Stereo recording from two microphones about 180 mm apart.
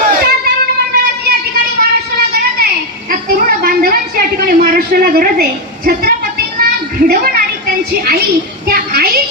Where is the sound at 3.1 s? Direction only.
55° right (ahead or behind).